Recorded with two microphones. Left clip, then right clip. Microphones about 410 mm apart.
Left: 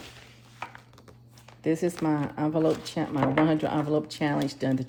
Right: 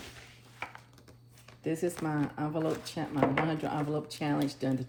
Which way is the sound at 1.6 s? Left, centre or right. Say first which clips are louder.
Left 6 dB; left.